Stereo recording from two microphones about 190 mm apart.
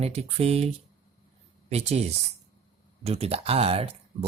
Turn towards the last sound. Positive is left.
turn(degrees=-30)  # may be behind; listen again after turning